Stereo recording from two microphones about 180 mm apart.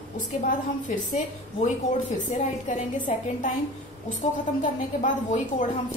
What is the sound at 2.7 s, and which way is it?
Speech, 45° left (ahead or behind).